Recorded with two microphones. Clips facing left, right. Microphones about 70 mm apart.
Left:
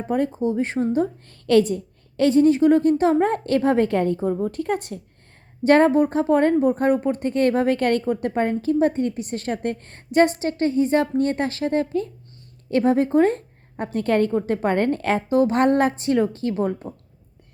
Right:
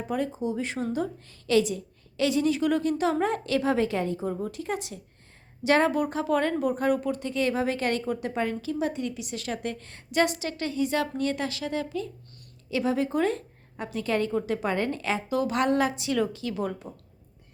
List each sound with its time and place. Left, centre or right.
0.3 s a woman's voice: left
1.3 s a woman's voice: left
4.3 s a woman's voice: left
4.6 s a woman's voice: left
15.3 s a woman's voice: left